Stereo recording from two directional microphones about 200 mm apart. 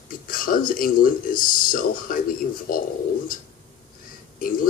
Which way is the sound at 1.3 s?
45° left (ahead or behind).